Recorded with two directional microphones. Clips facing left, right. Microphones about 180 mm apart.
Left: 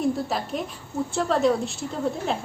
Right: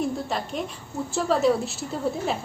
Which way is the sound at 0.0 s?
Centre (ahead or behind).